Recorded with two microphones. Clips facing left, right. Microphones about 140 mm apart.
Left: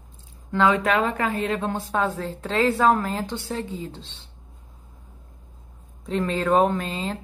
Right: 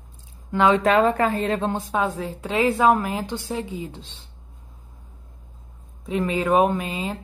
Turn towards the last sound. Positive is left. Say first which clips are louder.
# right 1 dB
turn(degrees=-10)  # may be behind; listen again after turning